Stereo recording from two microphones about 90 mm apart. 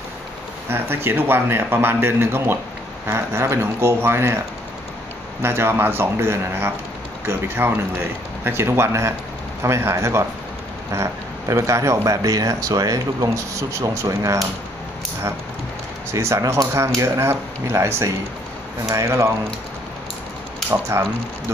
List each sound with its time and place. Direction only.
0.7 s a man's voice: 25° right (ahead or behind)
5.4 s a man's voice: 25° right (ahead or behind)
16.1 s speech: 30° right (ahead or behind)
20.9 s speech: 35° right (ahead or behind)